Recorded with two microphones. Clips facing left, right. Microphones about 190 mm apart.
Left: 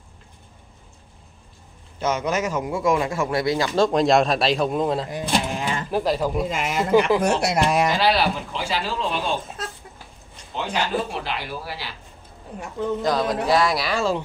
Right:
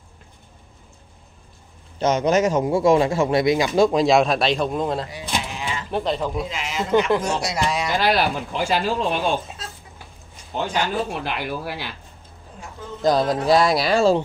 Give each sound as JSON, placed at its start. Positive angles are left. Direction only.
{"t": 2.0, "sound": "speech", "side_deg": -35}
{"t": 5.1, "sound": "sheep", "side_deg": 50}
{"t": 5.9, "sound": "speech", "side_deg": 5}
{"t": 6.5, "sound": "speech", "side_deg": 50}
{"t": 6.8, "sound": "speech", "side_deg": 5}
{"t": 7.2, "sound": "speech", "side_deg": 60}
{"t": 8.0, "sound": "speech", "side_deg": -50}
{"t": 10.5, "sound": "speech", "side_deg": -50}
{"t": 13.0, "sound": "speech", "side_deg": -30}